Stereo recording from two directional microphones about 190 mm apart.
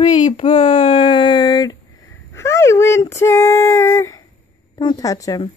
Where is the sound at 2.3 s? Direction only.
15° left (ahead or behind).